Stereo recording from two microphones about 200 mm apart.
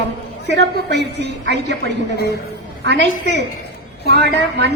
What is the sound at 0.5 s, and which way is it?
Speech, 60° right (ahead or behind).